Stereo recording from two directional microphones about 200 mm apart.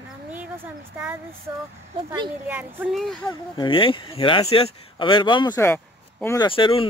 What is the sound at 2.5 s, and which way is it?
Speech, 10° right (ahead or behind).